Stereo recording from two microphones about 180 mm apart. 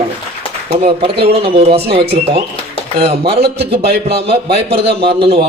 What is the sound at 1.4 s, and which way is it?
A man's voice, 35° right (ahead or behind).